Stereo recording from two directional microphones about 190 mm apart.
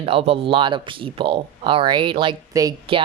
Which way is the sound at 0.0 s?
30° right (ahead or behind).